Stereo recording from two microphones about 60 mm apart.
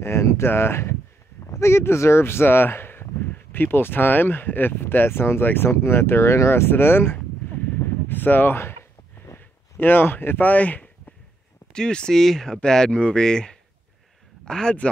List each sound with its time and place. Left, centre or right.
0.0 s speech: left
5.7 s speech: left
9.4 s a sound: left
11.7 s speech: centre